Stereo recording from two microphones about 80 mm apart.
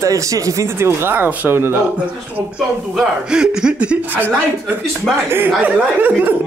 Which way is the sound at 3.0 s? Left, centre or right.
Centre.